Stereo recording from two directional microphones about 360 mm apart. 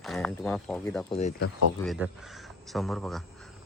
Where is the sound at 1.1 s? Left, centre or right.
Centre.